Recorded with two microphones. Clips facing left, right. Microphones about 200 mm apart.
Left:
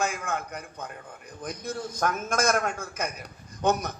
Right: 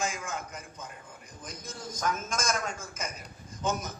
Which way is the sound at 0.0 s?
60° left (ahead or behind).